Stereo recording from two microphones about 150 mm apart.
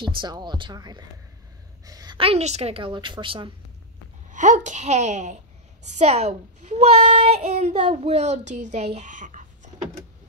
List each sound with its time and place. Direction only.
0.0 s speech: 30° right (ahead or behind)
1.9 s a sound: 25° right (ahead or behind)
2.1 s a woman's voice: 40° right (ahead or behind)
4.3 s a child's voice: 55° right (ahead or behind)